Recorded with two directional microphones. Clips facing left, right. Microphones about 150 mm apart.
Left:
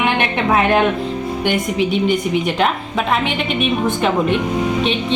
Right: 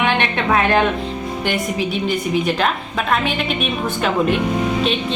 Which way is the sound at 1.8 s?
70° left (ahead or behind).